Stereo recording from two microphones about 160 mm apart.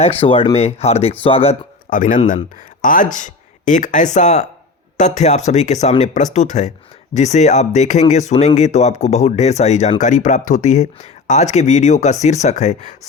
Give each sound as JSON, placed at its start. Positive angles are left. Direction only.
{"t": 0.0, "sound": "speech", "side_deg": 35}
{"t": 1.9, "sound": "speech", "side_deg": 55}